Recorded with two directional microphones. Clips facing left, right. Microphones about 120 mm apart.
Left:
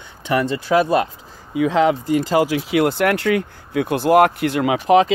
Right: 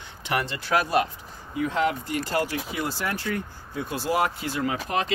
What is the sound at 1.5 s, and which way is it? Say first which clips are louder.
Speech: left 9 dB; 90° left.